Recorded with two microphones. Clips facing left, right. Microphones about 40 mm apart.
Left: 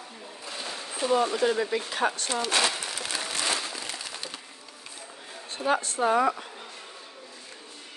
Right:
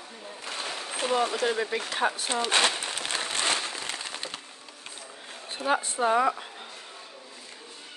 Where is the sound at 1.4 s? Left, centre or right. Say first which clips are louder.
Left 2 dB; centre.